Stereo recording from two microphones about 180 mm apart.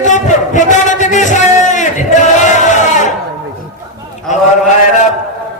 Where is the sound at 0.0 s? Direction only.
45° left (ahead or behind).